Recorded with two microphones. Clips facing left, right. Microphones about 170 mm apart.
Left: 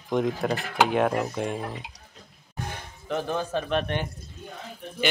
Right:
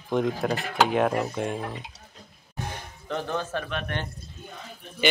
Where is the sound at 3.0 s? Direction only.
15° left (ahead or behind).